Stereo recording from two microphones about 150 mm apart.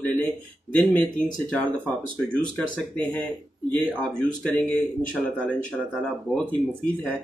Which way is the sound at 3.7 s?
10° left (ahead or behind).